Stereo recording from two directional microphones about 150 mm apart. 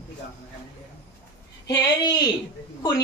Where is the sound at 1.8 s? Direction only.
25° left (ahead or behind).